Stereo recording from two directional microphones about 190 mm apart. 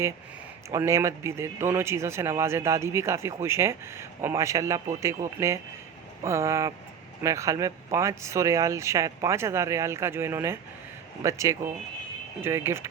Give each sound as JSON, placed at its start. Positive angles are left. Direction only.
{"t": 0.7, "sound": "speech", "side_deg": -15}